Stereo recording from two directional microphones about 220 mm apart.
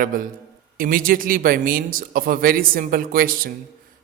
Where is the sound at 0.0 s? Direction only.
40° right (ahead or behind).